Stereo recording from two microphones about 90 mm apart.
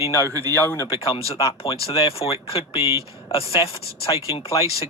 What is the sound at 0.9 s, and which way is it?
Speech, 90° left.